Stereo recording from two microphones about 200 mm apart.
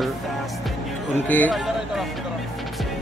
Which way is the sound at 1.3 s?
10° left (ahead or behind).